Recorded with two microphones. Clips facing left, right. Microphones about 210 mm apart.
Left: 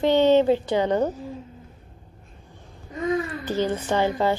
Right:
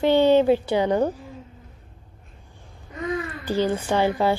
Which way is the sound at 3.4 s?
10° right (ahead or behind).